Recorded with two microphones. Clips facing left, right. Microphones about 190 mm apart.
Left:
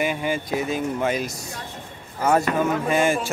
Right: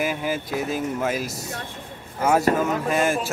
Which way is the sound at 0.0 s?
Centre (ahead or behind).